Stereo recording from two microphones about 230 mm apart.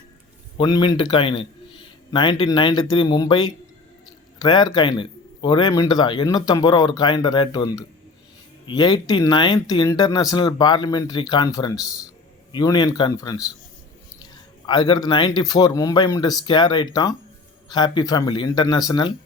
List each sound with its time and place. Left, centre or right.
0.5 s a man's voice: centre
14.7 s a man's voice: centre